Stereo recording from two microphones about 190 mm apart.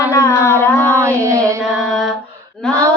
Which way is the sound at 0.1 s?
15° left (ahead or behind).